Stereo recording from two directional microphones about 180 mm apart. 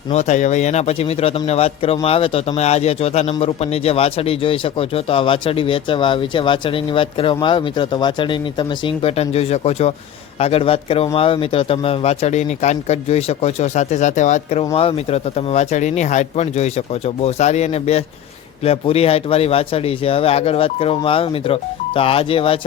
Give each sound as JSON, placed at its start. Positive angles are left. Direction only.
{"t": 0.1, "sound": "speech", "side_deg": 40}